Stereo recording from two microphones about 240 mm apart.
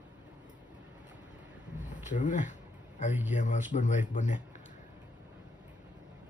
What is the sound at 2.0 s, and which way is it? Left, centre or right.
Speech, left.